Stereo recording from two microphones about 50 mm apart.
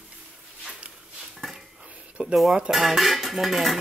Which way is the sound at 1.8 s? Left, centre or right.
Centre.